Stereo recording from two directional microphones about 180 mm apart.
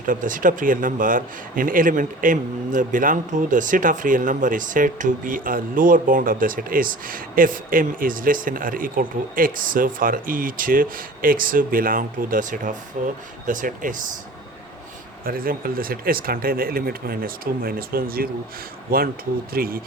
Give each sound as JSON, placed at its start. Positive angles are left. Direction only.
{"t": 0.0, "sound": "speech", "side_deg": -50}
{"t": 15.2, "sound": "speech", "side_deg": -55}